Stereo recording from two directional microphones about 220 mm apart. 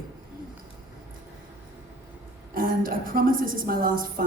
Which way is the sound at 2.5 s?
40° right (ahead or behind).